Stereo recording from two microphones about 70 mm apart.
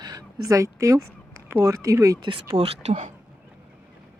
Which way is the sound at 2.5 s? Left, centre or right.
Right.